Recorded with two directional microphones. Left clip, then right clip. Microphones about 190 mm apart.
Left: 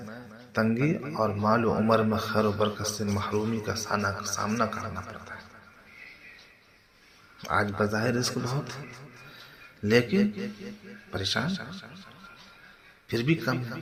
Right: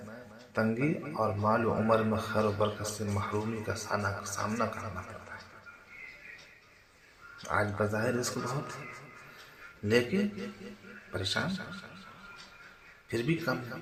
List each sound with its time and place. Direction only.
0.1 s a man's voice: 30° left (ahead or behind)
7.4 s a man's voice: 30° left (ahead or behind)
9.8 s a man's voice: 30° left (ahead or behind)
13.1 s a man's voice: 30° left (ahead or behind)